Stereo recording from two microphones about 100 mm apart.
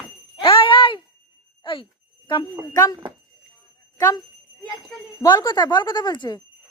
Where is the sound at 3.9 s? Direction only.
35° left (ahead or behind).